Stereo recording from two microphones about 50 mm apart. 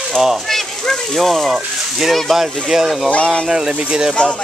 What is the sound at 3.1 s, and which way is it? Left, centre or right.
Speech, centre.